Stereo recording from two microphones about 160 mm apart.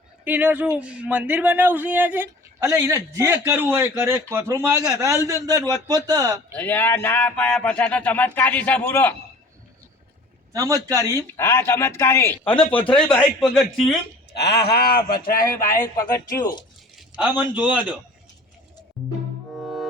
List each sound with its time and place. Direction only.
0.3 s a man's voice: 10° right (ahead or behind)
6.6 s speech: 10° left (ahead or behind)
10.5 s speech: 20° right (ahead or behind)
11.3 s speech: 15° left (ahead or behind)
14.3 s speech: 90° left; by 15.0 s 75° left (ahead or behind)
15.1 s speech: 65° left (ahead or behind)
15.5 s speech: 15° left (ahead or behind)
17.3 s a man's voice: 10° right (ahead or behind)
19.5 s music: centre (ahead or behind)